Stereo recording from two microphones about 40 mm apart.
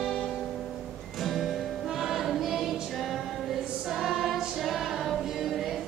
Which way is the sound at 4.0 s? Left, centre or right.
Centre.